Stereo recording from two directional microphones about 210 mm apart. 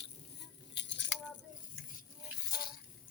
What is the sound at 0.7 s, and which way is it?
Cutlery, 55° left (ahead or behind).